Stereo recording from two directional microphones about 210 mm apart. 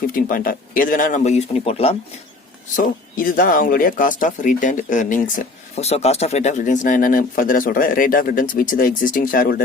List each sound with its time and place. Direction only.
0.1 s speech: 40° left (ahead or behind)
2.7 s speech: 40° left (ahead or behind)